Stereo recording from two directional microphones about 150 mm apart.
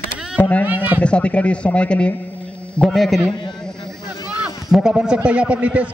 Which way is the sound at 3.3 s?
30° left (ahead or behind).